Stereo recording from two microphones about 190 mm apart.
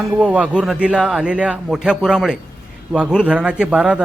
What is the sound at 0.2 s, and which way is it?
A man's voice, 5° right (ahead or behind).